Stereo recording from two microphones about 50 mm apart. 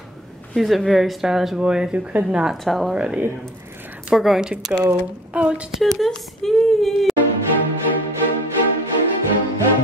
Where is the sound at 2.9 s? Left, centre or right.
Right.